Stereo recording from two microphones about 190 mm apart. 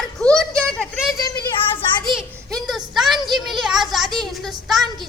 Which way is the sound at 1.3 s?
20° left (ahead or behind).